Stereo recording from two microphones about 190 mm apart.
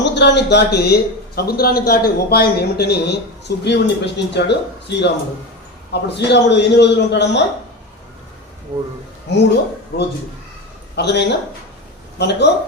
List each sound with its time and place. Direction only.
0.0 s a man's voice: 65° left (ahead or behind)
9.3 s a man's voice: 65° left (ahead or behind)